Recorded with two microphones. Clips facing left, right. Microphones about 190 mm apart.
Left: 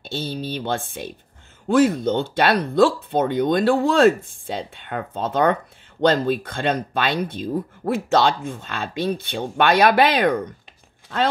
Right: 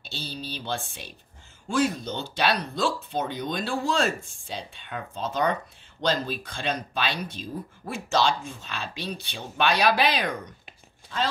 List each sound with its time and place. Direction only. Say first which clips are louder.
0.0 s speech: left 9 dB; 55° left (ahead or behind)